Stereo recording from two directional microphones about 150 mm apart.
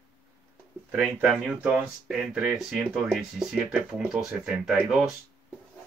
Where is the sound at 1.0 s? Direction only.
Centre (ahead or behind).